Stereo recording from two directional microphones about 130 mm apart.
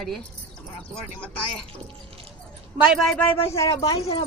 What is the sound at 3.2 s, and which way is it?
Speech, 25° left (ahead or behind).